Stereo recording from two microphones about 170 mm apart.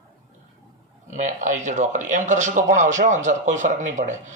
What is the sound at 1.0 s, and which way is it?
Speech, 45° right (ahead or behind).